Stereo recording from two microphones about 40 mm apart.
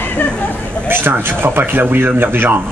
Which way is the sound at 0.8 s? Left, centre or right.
Right.